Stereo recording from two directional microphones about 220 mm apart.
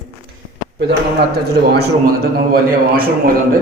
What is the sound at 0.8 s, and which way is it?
A man's voice, 50° right (ahead or behind).